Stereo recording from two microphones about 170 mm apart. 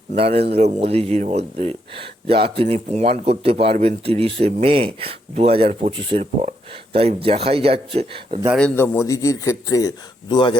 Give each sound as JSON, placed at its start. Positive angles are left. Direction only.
{"t": 0.2, "sound": "speech", "side_deg": -35}
{"t": 8.5, "sound": "a man's voice", "side_deg": 10}